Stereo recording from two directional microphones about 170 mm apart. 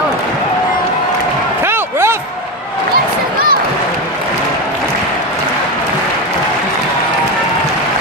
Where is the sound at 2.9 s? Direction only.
60° right (ahead or behind).